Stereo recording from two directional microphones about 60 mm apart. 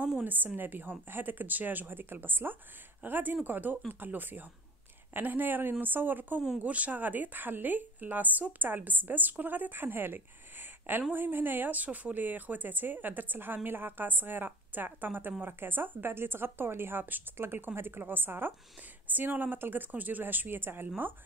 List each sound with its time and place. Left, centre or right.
0.2 s a woman's voice: right